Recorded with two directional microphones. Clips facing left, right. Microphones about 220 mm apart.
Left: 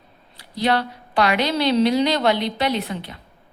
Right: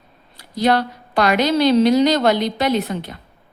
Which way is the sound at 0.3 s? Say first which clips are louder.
Right 4 dB; 45° right (ahead or behind).